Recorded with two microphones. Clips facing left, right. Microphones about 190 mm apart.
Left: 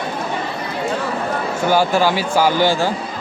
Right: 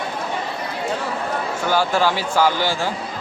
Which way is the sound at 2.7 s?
30° left (ahead or behind).